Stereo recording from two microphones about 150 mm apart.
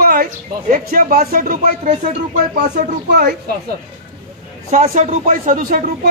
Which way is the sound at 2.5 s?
90° right.